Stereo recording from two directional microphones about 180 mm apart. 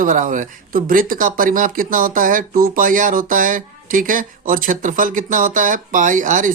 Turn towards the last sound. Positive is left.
turn(degrees=-45)  # may be behind; listen again after turning